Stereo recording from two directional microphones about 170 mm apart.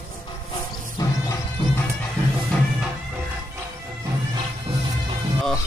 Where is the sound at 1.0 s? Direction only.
20° left (ahead or behind).